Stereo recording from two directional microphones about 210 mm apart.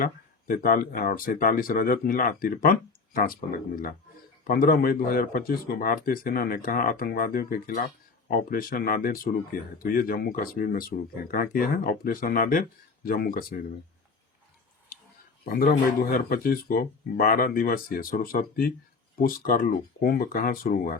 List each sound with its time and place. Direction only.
0.0 s speech: 45° left (ahead or behind)
4.4 s speech: 45° left (ahead or behind)
15.4 s speech: 45° left (ahead or behind)